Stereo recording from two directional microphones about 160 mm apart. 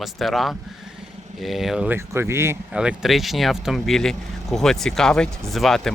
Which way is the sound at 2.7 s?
5° right (ahead or behind).